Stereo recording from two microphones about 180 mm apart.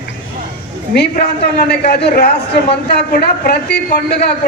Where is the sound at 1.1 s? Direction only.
60° left (ahead or behind).